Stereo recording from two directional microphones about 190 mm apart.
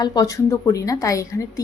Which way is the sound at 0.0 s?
20° left (ahead or behind).